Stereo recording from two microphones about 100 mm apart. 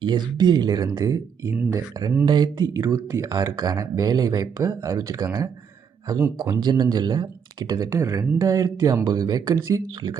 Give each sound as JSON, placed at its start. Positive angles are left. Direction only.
{"t": 0.0, "sound": "speech", "side_deg": -50}
{"t": 2.6, "sound": "speech", "side_deg": -35}
{"t": 7.9, "sound": "speech", "side_deg": -30}